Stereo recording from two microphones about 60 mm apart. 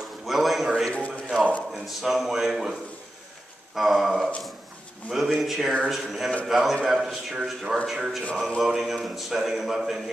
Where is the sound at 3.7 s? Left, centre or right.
Centre.